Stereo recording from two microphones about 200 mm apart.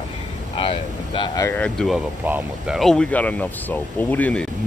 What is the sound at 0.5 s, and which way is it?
Speech, 25° left (ahead or behind).